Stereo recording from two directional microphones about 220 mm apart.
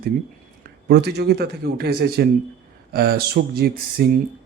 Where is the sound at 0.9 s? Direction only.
45° right (ahead or behind).